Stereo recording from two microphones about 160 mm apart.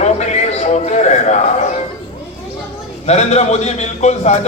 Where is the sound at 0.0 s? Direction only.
45° left (ahead or behind).